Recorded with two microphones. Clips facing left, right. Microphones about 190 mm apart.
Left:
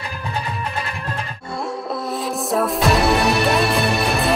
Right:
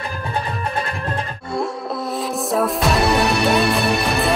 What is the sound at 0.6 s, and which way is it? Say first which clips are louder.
Music: right 3 dB; 30° right (ahead or behind).